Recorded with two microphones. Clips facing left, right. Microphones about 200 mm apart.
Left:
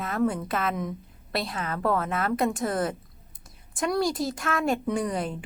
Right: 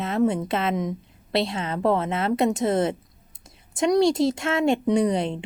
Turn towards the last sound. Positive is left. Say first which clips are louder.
# right 6 dB
turn(degrees=-25)  # may be behind; listen again after turning